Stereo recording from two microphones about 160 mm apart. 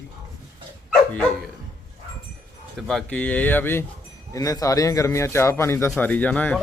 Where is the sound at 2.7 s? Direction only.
5° left (ahead or behind).